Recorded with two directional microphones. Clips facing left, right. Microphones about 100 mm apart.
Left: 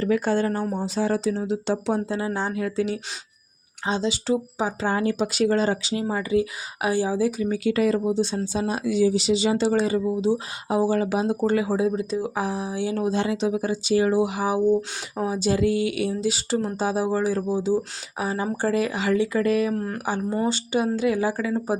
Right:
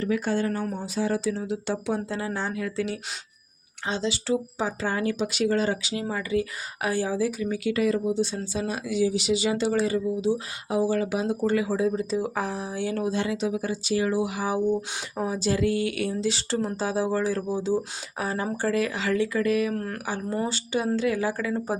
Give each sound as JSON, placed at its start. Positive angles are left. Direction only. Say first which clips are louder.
{"t": 0.0, "sound": "speech", "louder": "left 4 dB", "side_deg": 45}
{"t": 5.2, "sound": "speech", "louder": "left 2 dB", "side_deg": 40}
{"t": 11.9, "sound": "speech", "louder": "left 1 dB", "side_deg": 0}
{"t": 13.0, "sound": "speech", "louder": "left 3 dB", "side_deg": 25}
{"t": 15.1, "sound": "speech", "louder": "left 3 dB", "side_deg": 10}
{"t": 19.4, "sound": "speech", "louder": "left 2 dB", "side_deg": 35}
{"t": 19.7, "sound": "speech", "louder": "left 4 dB", "side_deg": 15}
{"t": 21.4, "sound": "speech", "louder": "left 3 dB", "side_deg": 5}